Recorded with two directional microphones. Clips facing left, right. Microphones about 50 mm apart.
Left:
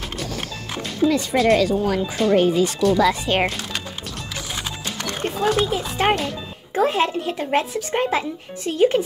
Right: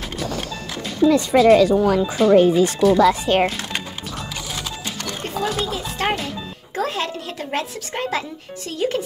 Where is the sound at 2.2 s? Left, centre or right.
Centre.